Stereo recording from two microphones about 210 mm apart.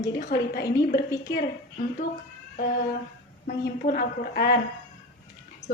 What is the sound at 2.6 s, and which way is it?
Speech, 40° left (ahead or behind).